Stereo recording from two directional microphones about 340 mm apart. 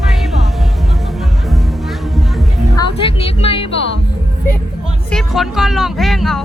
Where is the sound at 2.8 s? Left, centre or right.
Centre.